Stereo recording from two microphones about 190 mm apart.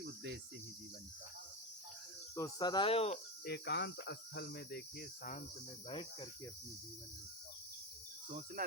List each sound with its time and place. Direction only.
0.0 s cricket: 65° right (ahead or behind)
2.3 s speech: 20° left (ahead or behind)
3.4 s cricket: 60° left (ahead or behind)
5.9 s speech: 25° left (ahead or behind)
8.3 s speech: 40° right (ahead or behind)